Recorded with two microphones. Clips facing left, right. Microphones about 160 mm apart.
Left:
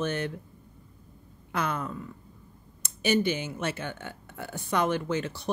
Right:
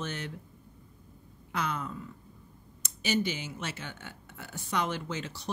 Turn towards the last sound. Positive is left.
turn(degrees=55)  # may be behind; listen again after turning